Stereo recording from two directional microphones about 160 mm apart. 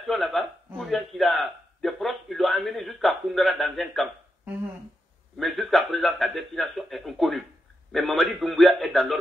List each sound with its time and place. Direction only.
0.0 s a man's voice: centre (ahead or behind)
5.4 s a man's voice: centre (ahead or behind)